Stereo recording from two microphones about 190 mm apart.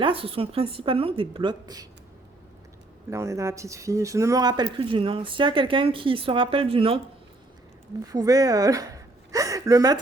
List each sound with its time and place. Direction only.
0.0 s speech: 30° right (ahead or behind)
3.1 s speech: 15° right (ahead or behind)
8.0 s a woman's voice: 20° right (ahead or behind)